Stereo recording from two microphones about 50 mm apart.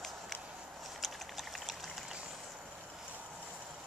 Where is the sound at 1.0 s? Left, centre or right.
Centre.